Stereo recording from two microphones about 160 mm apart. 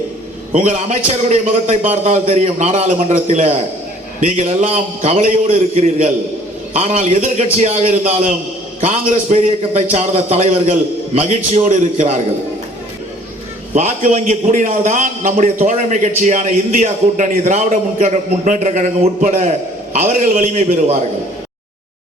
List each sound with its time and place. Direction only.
0.5 s a man's voice: 45° right (ahead or behind)
13.7 s a man's voice: 55° right (ahead or behind)